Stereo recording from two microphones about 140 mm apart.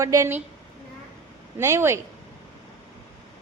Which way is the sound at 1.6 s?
20° right (ahead or behind).